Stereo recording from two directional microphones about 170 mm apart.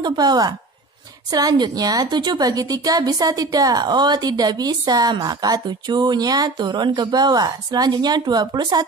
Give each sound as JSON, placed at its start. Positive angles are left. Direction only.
{"t": 0.0, "sound": "a woman's voice", "side_deg": -25}